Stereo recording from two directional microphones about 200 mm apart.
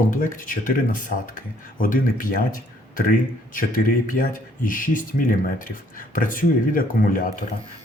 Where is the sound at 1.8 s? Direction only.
45° left (ahead or behind).